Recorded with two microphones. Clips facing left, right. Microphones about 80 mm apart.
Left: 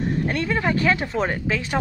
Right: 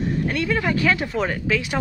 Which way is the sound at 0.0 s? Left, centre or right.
Left.